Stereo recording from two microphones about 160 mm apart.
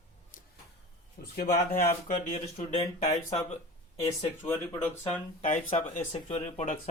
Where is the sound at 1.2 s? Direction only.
65° left (ahead or behind).